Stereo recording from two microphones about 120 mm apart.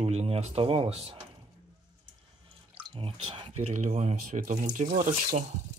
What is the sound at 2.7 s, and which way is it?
Speech, 50° right (ahead or behind).